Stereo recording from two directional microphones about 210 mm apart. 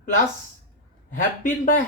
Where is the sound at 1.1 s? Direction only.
40° left (ahead or behind).